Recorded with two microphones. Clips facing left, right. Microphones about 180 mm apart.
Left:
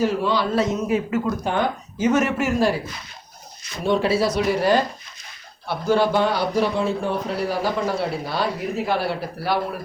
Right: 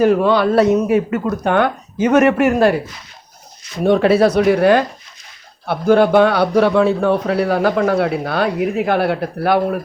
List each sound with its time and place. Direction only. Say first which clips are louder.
0.0 s a man's voice: right 8 dB; 55° right (ahead or behind)
3.8 s a man's voice: right 7 dB; 60° right (ahead or behind)